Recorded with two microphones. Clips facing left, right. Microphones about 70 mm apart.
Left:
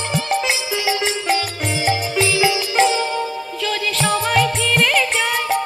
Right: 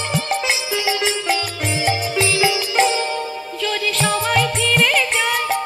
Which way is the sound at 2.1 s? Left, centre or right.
Left.